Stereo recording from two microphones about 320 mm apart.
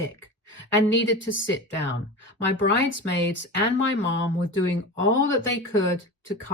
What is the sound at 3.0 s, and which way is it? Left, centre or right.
Speech, left.